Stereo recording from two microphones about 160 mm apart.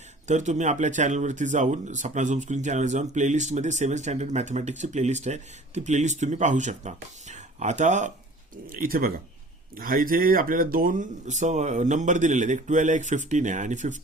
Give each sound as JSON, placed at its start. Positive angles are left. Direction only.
{"t": 0.3, "sound": "speech", "side_deg": -45}
{"t": 8.6, "sound": "speech", "side_deg": -60}